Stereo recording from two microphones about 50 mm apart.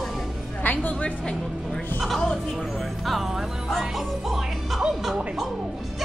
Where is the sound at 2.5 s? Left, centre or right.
Centre.